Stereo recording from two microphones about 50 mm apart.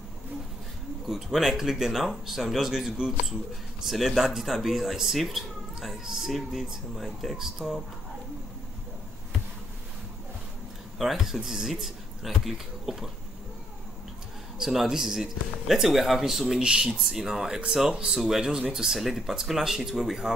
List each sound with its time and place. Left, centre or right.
1.0 s speech: centre
11.0 s speech: centre
14.6 s speech: centre
16.6 s speech: centre
17.0 s speech: centre